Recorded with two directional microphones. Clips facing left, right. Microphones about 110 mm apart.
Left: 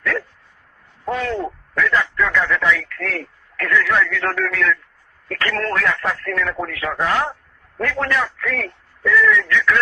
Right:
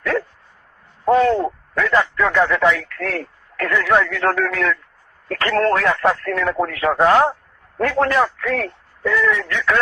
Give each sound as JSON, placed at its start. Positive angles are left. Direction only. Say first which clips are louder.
{"t": 0.0, "sound": "dog", "louder": "right 3 dB", "side_deg": -35}
{"t": 1.0, "sound": "speech", "louder": "right 8 dB", "side_deg": -35}